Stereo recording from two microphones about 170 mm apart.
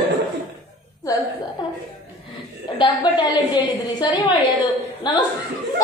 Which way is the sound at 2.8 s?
25° left (ahead or behind).